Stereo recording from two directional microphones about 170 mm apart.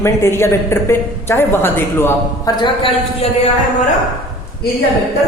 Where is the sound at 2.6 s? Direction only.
35° left (ahead or behind).